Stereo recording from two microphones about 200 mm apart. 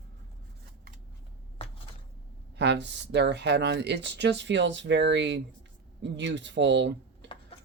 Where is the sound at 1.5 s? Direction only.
30° left (ahead or behind).